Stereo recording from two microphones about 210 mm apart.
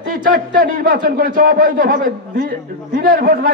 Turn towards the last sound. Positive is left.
turn(degrees=-40)  # may be behind; listen again after turning